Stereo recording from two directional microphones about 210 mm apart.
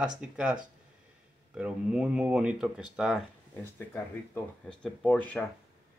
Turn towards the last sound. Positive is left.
turn(degrees=5)  # may be behind; listen again after turning